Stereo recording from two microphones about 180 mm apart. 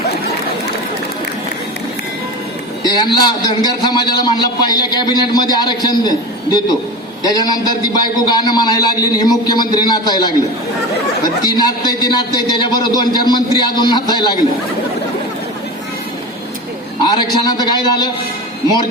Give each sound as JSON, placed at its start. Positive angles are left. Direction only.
{"t": 2.8, "sound": "a man's voice", "side_deg": 25}
{"t": 11.4, "sound": "a man's voice", "side_deg": 20}
{"t": 17.0, "sound": "a sound", "side_deg": 25}
{"t": 17.6, "sound": "a man's voice", "side_deg": 25}